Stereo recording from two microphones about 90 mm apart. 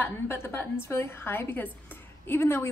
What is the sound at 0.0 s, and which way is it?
A woman's voice, 25° left (ahead or behind).